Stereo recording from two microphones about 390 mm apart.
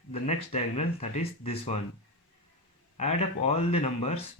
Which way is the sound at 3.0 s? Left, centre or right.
Centre.